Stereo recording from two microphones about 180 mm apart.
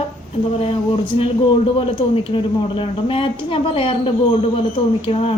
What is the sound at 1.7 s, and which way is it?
A woman's voice, 30° left (ahead or behind).